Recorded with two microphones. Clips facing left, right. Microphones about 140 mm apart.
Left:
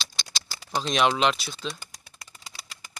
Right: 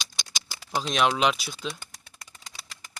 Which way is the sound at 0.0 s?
15° right (ahead or behind).